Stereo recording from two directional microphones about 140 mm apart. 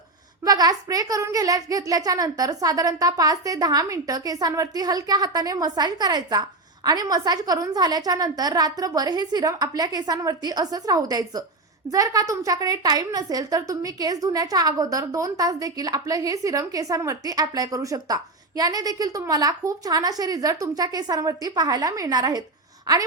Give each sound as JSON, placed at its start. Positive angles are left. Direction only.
{"t": 0.4, "sound": "a woman's voice", "side_deg": -25}